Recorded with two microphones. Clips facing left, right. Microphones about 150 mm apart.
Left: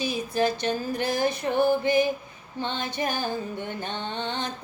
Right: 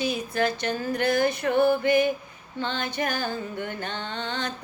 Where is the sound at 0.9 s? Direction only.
60° right (ahead or behind).